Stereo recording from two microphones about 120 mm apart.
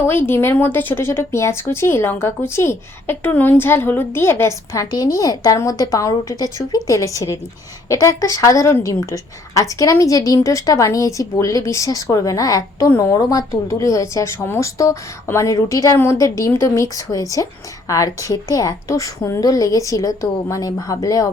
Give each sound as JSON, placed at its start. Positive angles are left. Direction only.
{"t": 0.1, "sound": "speech", "side_deg": 20}